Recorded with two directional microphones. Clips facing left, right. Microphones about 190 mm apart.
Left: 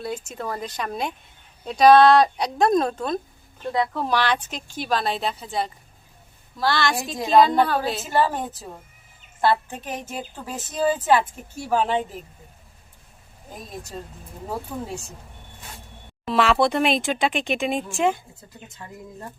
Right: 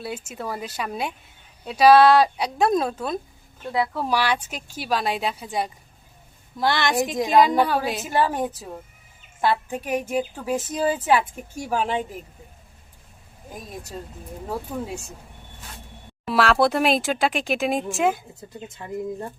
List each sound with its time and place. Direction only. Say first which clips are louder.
0.0 s a woman's voice: left 1 dB; 10° right (ahead or behind)
16.2 s speech: even; 5° right (ahead or behind)